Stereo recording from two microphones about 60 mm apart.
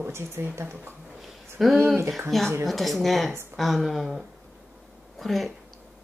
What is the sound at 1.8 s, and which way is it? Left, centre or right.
Speech, right.